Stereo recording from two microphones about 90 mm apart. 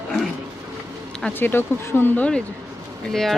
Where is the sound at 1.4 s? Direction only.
25° left (ahead or behind).